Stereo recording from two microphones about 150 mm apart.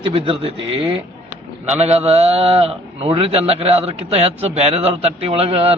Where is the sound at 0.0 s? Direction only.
40° right (ahead or behind).